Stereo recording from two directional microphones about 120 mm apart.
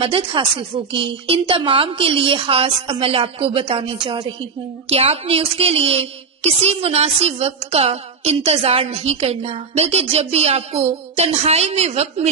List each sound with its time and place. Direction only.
0.0 s a woman's voice: 45° right (ahead or behind); by 12.3 s 60° right (ahead or behind)